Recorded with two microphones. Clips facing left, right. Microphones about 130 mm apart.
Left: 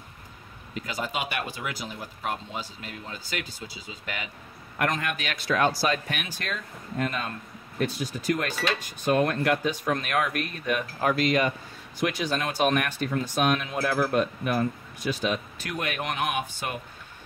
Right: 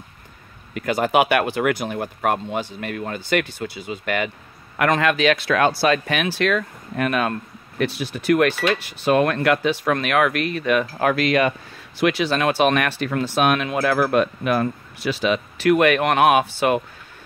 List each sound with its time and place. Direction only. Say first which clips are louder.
0.7 s speech: right 13 dB; 65° right (ahead or behind)
4.7 s speech: right 9 dB; 90° right